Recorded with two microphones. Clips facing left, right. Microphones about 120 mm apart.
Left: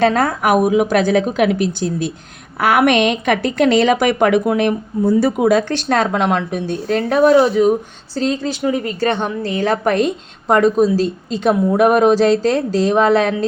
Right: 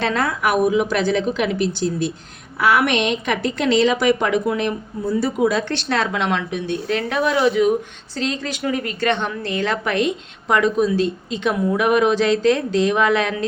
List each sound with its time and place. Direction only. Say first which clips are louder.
0.0 s a woman's voice: left 5 dB; 45° left (ahead or behind)